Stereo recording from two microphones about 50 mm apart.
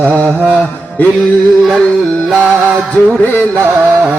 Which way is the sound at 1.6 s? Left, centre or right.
Centre.